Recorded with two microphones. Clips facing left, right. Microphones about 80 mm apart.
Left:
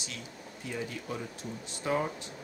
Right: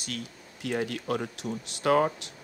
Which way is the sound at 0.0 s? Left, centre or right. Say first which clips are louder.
Right 5 dB; right.